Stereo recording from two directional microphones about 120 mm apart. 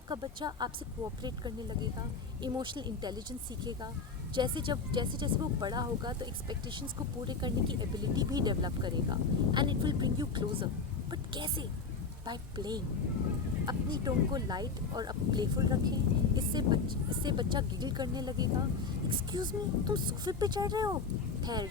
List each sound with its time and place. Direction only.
0.1 s speech: 40° right (ahead or behind)
4.4 s speech: 40° right (ahead or behind)